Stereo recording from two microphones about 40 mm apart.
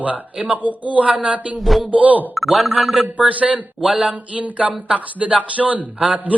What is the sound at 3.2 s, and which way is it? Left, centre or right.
Speech, right.